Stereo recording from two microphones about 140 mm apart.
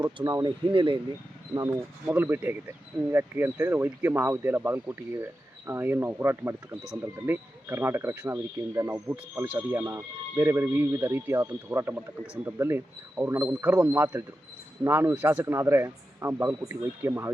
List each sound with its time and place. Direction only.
0.0 s speech: 25° right (ahead or behind)
1.5 s speech: 20° right (ahead or behind)